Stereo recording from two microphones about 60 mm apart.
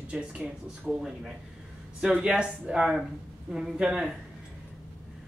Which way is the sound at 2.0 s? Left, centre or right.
Centre.